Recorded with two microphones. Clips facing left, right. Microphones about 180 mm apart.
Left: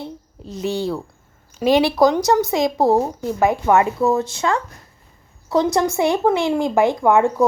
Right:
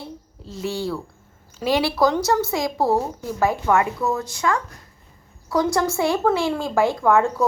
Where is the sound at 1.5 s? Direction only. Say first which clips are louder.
Left 5 dB; 20° left (ahead or behind).